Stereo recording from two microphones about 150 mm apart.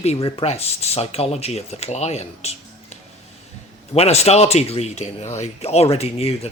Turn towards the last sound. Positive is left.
turn(degrees=40)  # may be behind; listen again after turning